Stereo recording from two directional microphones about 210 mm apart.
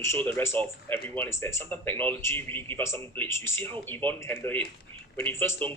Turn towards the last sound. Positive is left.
turn(degrees=10)  # may be behind; listen again after turning